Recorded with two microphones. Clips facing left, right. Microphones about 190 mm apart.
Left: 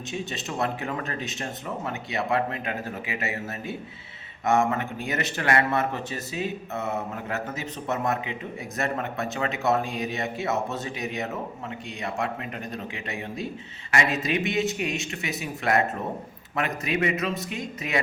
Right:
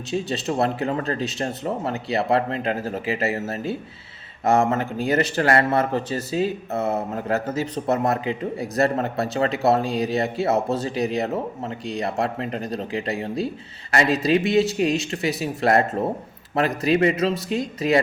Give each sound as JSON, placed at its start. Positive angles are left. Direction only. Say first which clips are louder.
{"t": 0.1, "sound": "speech", "louder": "right 9 dB", "side_deg": -35}